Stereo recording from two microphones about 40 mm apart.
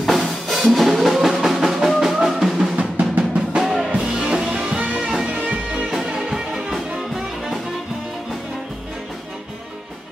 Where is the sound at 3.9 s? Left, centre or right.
Right.